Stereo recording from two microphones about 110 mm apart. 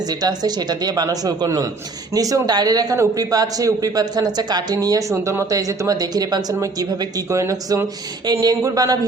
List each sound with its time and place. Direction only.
0.1 s a man's voice: 35° right (ahead or behind)